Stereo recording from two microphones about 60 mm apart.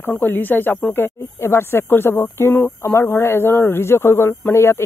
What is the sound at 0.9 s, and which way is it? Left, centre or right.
Speech, left.